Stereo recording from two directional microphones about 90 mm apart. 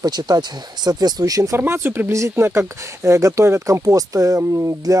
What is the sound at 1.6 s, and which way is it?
Speech, 25° right (ahead or behind).